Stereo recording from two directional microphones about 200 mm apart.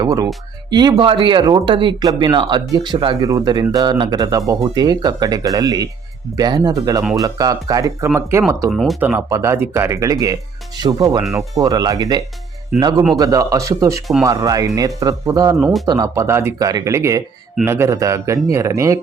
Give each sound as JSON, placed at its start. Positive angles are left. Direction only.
{"t": 0.0, "sound": "speech", "side_deg": -20}
{"t": 8.7, "sound": "speech", "side_deg": 0}